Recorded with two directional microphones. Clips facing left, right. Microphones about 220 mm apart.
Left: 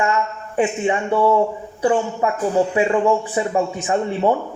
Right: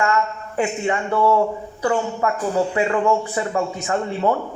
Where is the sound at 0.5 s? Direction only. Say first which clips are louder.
Left 3 dB; 20° left (ahead or behind).